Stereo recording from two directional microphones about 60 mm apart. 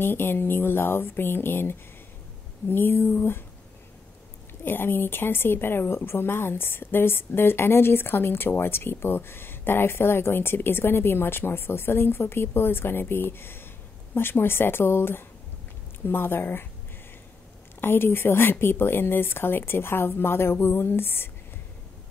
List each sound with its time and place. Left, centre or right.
0.0 s speech: left
4.6 s speech: left
17.7 s speech: left